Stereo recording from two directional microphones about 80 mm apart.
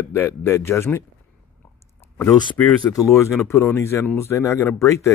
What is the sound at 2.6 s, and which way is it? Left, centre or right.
Speech, centre.